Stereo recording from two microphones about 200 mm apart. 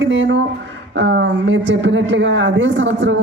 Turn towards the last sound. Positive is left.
turn(degrees=-65)  # may be behind; listen again after turning